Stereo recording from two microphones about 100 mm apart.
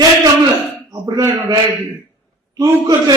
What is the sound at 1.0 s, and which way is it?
Speech, 40° right (ahead or behind).